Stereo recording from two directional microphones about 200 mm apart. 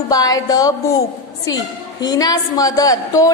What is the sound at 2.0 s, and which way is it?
A woman's voice, 20° left (ahead or behind).